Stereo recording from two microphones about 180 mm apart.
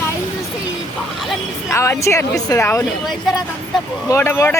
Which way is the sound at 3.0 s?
Centre (ahead or behind).